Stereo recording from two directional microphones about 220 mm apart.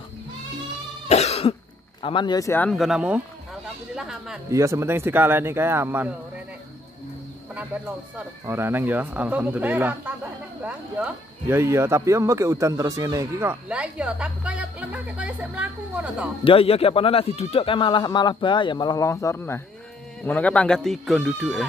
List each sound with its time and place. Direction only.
1.0 s cough: 30° left (ahead or behind)
2.0 s a man's voice: 20° left (ahead or behind)
2.7 s speech: centre (ahead or behind)
4.5 s speech: 15° right (ahead or behind)
7.5 s speech: 5° right (ahead or behind)
16.4 s a man's voice: 25° left (ahead or behind); by 21.6 s centre (ahead or behind)